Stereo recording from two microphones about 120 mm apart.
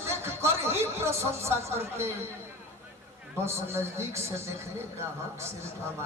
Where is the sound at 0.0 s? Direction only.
20° right (ahead or behind).